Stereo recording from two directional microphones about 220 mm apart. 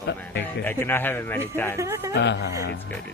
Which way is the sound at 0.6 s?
10° left (ahead or behind).